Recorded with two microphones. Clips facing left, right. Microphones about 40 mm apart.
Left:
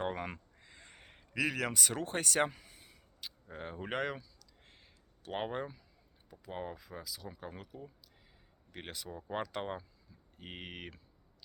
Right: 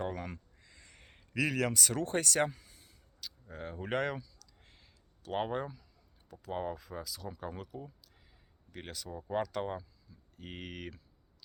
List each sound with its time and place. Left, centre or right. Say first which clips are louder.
0.0 s speech: left 1 dB; left
0.6 s a sound: left 2 dB; left
1.3 s speech: right 2 dB; centre
3.5 s speech: right 3 dB; centre
4.2 s a sound: right 6 dB; centre
6.4 s speech: right 5 dB; centre
8.7 s speech: right 1 dB; left